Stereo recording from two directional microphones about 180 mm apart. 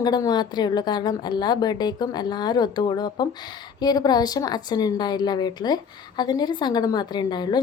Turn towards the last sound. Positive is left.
turn(degrees=25)  # may be behind; listen again after turning